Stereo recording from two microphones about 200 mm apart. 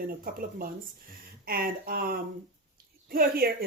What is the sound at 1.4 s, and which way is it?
Speech, 45° right (ahead or behind).